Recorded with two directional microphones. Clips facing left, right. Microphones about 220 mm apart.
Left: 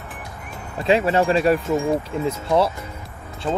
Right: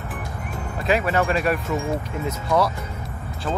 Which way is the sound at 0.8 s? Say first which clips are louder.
Left 3 dB; 30° left (ahead or behind).